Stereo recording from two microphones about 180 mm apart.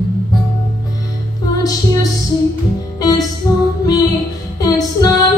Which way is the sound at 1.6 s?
20° left (ahead or behind).